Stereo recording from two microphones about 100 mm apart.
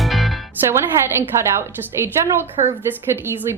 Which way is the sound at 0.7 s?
25° right (ahead or behind).